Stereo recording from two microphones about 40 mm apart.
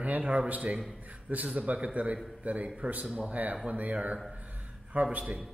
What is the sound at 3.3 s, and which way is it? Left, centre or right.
Speech, right.